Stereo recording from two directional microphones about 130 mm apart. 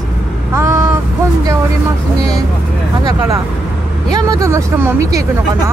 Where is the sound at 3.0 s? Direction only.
30° right (ahead or behind).